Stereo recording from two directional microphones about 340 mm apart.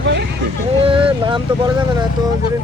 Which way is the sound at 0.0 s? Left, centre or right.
Right.